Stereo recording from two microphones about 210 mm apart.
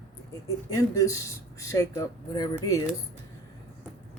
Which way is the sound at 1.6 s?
15° left (ahead or behind).